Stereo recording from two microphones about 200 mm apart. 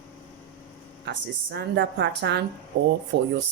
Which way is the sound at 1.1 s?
60° right (ahead or behind).